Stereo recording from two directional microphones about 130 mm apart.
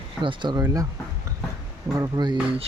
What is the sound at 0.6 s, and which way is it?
Speech, 25° right (ahead or behind).